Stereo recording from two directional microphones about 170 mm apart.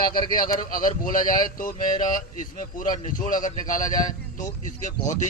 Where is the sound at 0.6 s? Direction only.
55° left (ahead or behind).